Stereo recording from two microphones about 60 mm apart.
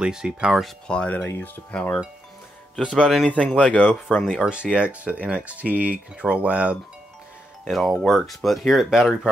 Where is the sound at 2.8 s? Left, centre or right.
Centre.